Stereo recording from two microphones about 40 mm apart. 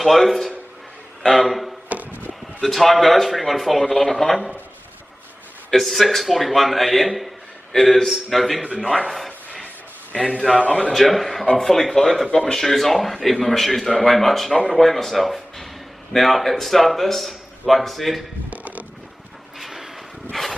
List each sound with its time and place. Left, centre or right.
0.0 s a man's voice: centre
5.7 s a man's voice: centre
10.1 s a man's voice: left
10.9 s a man's voice: centre
12.3 s speech: left
12.5 s a man's voice: centre
18.5 s a sound: right
19.6 s a sound: centre
20.3 s a sound: centre